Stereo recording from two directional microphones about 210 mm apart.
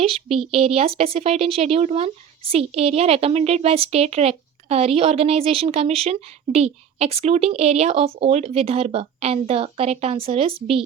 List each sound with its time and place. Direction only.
0.0 s speech: 25° right (ahead or behind)